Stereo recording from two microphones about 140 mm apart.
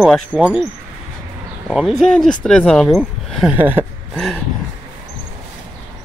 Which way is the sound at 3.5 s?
15° right (ahead or behind).